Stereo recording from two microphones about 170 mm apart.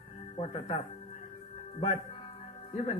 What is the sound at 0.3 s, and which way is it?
Speech, 30° left (ahead or behind).